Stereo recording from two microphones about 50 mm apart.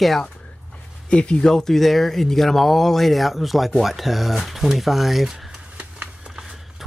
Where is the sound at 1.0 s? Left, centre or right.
Left.